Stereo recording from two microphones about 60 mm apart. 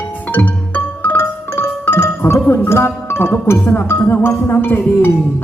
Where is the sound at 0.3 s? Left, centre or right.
Left.